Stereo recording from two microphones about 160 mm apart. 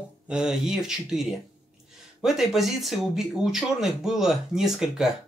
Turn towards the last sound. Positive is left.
turn(degrees=-5)  # may be behind; listen again after turning